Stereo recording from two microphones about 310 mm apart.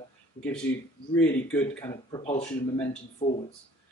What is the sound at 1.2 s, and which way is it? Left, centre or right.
Speech, centre.